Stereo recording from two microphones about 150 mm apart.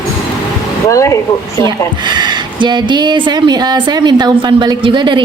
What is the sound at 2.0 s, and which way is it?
A woman's voice, 30° right (ahead or behind).